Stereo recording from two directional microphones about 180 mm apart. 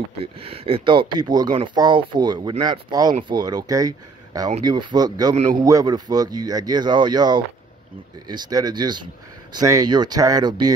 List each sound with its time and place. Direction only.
0.2 s speech: 30° right (ahead or behind)